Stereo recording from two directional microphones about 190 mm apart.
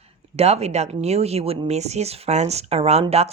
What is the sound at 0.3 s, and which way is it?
Speech, 35° right (ahead or behind).